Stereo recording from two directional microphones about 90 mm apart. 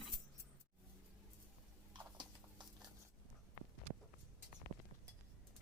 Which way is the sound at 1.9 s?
60° right (ahead or behind).